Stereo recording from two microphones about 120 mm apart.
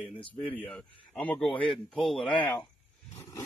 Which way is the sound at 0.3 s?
10° left (ahead or behind).